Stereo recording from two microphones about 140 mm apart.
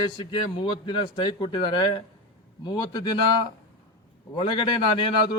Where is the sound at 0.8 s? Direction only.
35° left (ahead or behind).